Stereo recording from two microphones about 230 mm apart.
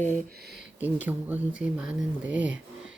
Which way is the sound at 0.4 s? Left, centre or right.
Centre.